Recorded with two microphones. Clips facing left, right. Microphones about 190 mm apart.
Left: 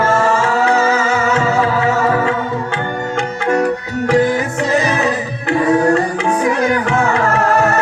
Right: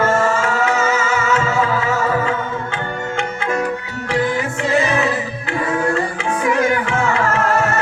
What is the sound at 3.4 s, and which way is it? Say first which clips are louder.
Music: left 7 dB; 40° left (ahead or behind).